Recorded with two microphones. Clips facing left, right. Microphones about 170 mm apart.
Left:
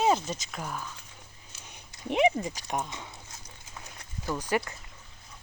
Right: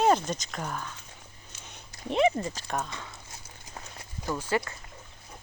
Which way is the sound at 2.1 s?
15° left (ahead or behind).